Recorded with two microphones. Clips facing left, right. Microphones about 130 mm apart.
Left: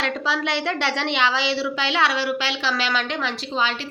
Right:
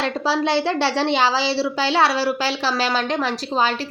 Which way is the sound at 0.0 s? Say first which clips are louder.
Right 4 dB; 35° right (ahead or behind).